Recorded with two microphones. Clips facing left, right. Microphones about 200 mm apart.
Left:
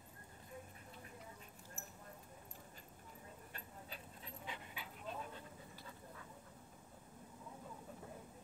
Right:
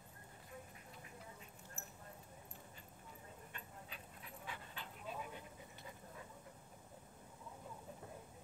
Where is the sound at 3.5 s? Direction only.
35° left (ahead or behind).